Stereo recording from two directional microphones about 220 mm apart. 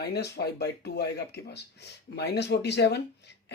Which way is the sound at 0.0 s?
50° left (ahead or behind).